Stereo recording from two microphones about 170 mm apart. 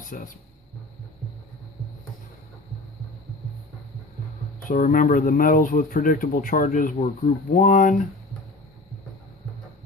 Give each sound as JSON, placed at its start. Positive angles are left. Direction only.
{"t": 0.1, "sound": "speech", "side_deg": 50}
{"t": 4.6, "sound": "speech", "side_deg": 50}